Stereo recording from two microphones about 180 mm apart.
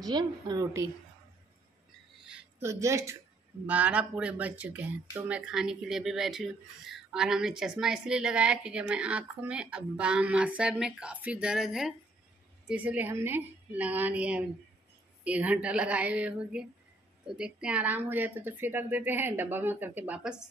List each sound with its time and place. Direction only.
0.0 s a woman's voice: 25° right (ahead or behind)
2.6 s a woman's voice: 15° right (ahead or behind)